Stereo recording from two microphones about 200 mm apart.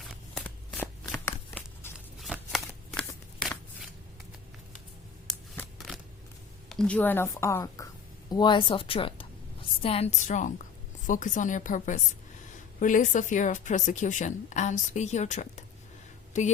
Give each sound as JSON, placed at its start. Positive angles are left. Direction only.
{"t": 0.0, "sound": "shuffling cards", "side_deg": 0}
{"t": 2.1, "sound": "shuffling cards", "side_deg": 0}
{"t": 6.7, "sound": "a woman's voice", "side_deg": 5}